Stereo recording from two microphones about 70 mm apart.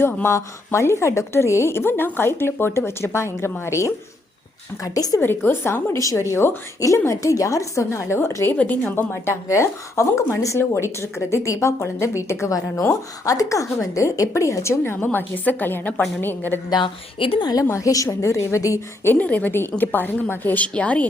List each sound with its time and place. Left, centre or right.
0.3 s a woman's voice: left
4.8 s a woman's voice: left
5.2 s a woman's voice: left
6.0 s a woman's voice: left
6.7 s speech: left
8.5 s a woman's voice: left
9.2 s speech: left
15.0 s a woman's voice: left
17.7 s speech: left
19.1 s a woman's voice: centre